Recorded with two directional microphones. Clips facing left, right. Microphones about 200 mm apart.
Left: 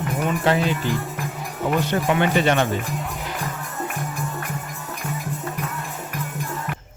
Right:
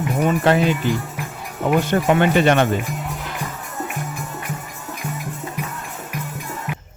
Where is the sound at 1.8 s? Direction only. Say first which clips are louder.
Right 4 dB; 50° right (ahead or behind).